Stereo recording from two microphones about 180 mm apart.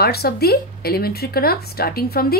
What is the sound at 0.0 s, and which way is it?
A woman's voice, 60° left (ahead or behind).